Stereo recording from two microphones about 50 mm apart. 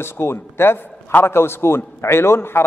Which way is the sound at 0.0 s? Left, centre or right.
Left.